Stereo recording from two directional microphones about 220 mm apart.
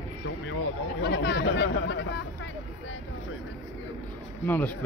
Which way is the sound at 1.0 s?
50° left (ahead or behind).